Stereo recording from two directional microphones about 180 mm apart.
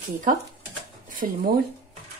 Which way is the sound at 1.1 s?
50° right (ahead or behind).